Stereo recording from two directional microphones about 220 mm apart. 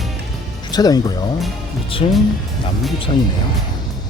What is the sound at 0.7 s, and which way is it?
Speech, 15° left (ahead or behind).